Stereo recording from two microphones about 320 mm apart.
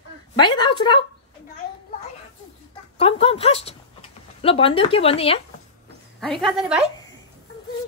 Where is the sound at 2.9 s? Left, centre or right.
Centre.